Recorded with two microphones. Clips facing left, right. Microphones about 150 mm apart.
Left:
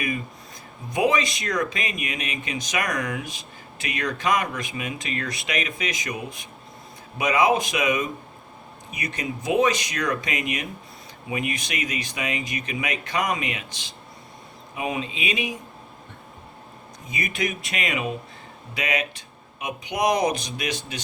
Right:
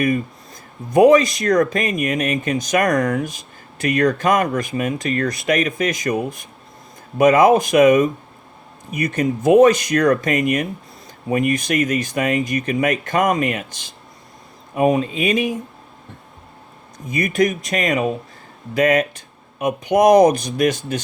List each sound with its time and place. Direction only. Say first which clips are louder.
0.9 s speech: right 11 dB; 45° right (ahead or behind)
17.1 s speech: right 10 dB; 50° right (ahead or behind)